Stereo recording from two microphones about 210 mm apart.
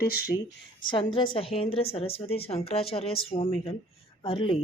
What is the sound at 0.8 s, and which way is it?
A woman's voice, 25° left (ahead or behind).